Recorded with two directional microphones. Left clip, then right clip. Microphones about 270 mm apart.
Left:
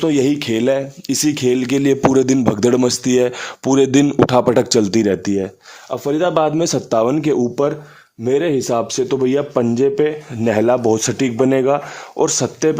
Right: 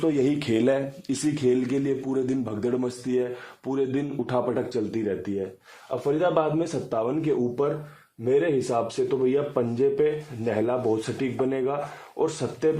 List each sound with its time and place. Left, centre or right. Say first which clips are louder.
0.0 s speech: left 8 dB; left